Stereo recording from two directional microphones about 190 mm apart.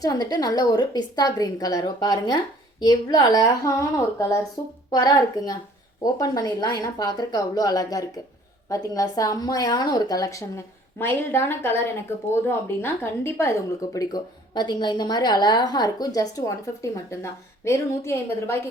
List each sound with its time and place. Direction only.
0.0 s a woman's voice: 20° left (ahead or behind)